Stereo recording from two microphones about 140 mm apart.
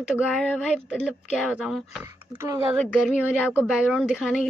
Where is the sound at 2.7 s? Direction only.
Centre (ahead or behind).